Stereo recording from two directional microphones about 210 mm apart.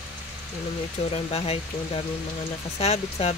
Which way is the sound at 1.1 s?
30° left (ahead or behind).